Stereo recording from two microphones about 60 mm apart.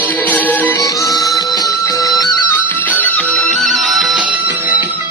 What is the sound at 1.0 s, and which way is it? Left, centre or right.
Music, left.